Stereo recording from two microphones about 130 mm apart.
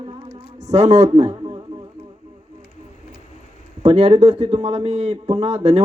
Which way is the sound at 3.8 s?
50° right (ahead or behind).